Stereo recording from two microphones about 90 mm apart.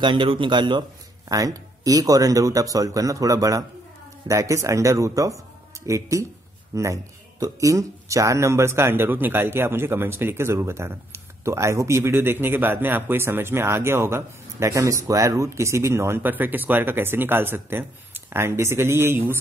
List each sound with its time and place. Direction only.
0.0 s speech: 65° right (ahead or behind)
1.3 s speech: 40° right (ahead or behind)